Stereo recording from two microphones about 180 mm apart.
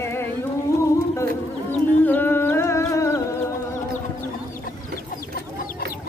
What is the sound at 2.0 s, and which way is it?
Music, 10° left (ahead or behind).